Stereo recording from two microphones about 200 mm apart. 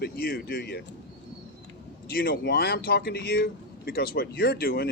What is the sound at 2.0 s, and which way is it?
Speech, 50° left (ahead or behind).